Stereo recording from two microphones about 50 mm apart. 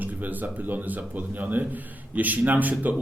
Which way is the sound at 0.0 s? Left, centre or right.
Right.